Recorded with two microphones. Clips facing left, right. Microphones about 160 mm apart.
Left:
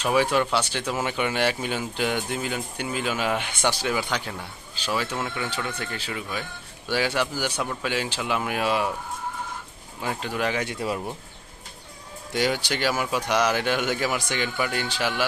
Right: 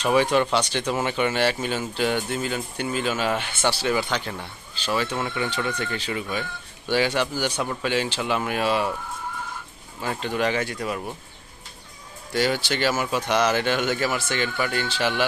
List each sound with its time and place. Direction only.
0.0 s speech: 5° left (ahead or behind)
10.0 s speech: 10° left (ahead or behind)
10.7 s speech: 25° left (ahead or behind)
12.3 s speech: 15° left (ahead or behind)